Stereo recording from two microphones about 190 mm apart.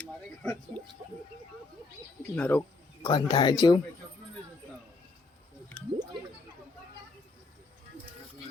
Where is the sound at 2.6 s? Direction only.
25° left (ahead or behind).